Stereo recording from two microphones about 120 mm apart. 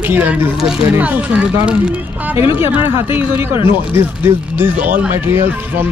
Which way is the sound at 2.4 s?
45° left (ahead or behind).